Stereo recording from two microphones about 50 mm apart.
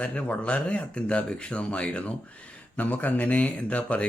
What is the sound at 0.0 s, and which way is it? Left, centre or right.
Speech, left.